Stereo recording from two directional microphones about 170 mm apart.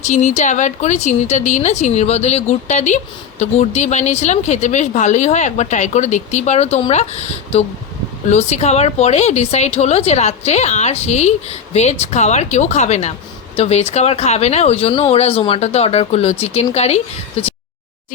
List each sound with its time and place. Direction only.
0.0 s a woman's voice: 45° left (ahead or behind)